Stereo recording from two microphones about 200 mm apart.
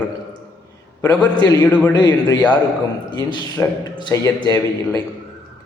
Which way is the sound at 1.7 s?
5° left (ahead or behind).